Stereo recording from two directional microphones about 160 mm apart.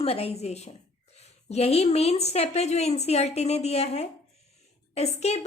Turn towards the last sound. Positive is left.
turn(degrees=40)  # may be behind; listen again after turning